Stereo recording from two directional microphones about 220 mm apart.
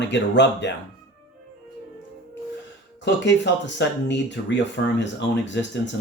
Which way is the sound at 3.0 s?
55° left (ahead or behind).